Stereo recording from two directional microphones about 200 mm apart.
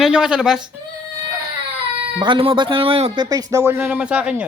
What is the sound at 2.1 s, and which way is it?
Speech, 25° right (ahead or behind).